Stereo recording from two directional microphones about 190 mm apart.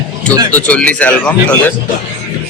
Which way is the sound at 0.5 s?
5° left (ahead or behind).